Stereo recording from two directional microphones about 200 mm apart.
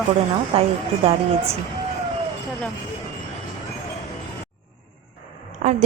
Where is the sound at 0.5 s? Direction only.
30° right (ahead or behind).